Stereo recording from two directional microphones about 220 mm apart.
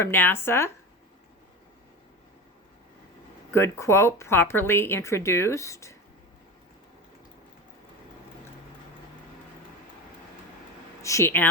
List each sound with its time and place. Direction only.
0.0 s speech: 10° left (ahead or behind)
3.5 s speech: 10° left (ahead or behind)
11.0 s speech: 10° left (ahead or behind)